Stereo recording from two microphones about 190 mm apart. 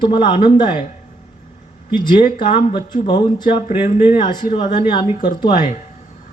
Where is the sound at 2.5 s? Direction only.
35° left (ahead or behind).